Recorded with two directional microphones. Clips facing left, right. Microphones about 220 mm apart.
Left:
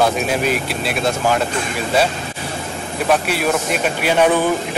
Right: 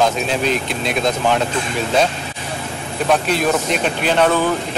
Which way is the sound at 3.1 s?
10° left (ahead or behind).